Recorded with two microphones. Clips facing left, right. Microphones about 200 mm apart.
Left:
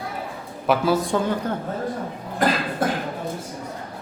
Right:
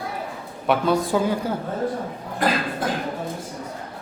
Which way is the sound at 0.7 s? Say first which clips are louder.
Even; centre (ahead or behind).